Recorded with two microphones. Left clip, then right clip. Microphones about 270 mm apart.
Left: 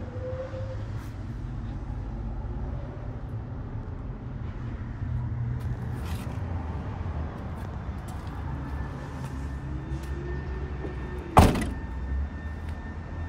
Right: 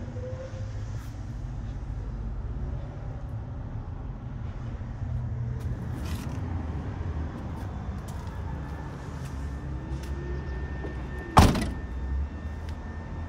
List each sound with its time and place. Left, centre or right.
11.3 s thunk: centre